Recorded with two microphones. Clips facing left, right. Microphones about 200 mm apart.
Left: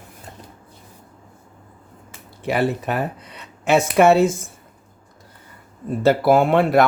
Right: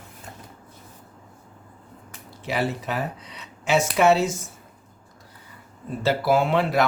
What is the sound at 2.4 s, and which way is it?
Speech, 55° left (ahead or behind).